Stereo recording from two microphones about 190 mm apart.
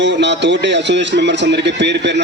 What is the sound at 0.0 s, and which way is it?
Speech, 70° right (ahead or behind).